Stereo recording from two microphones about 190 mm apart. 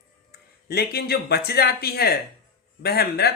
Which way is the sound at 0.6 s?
55° left (ahead or behind).